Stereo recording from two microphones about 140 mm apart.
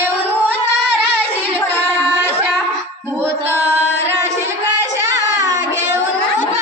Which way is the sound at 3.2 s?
15° right (ahead or behind).